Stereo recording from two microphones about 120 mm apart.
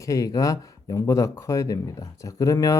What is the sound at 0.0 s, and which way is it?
Speech, 30° left (ahead or behind).